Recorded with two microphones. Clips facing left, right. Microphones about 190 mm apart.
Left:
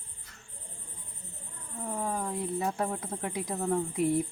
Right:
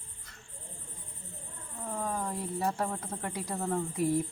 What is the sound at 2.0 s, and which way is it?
Cricket, 10° left (ahead or behind).